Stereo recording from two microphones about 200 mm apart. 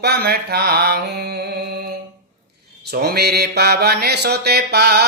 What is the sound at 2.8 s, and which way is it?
Mantra, 55° right (ahead or behind).